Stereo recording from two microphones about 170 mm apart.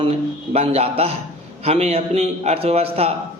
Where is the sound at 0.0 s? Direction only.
35° right (ahead or behind).